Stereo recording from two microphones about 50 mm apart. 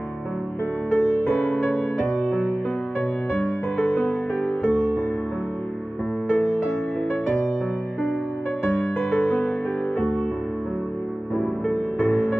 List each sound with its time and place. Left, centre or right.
0.9 s music: left
3.8 s music: left
6.3 s music: left
8.9 s music: left
11.7 s music: left